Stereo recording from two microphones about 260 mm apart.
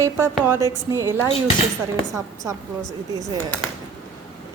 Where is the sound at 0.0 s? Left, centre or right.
Centre.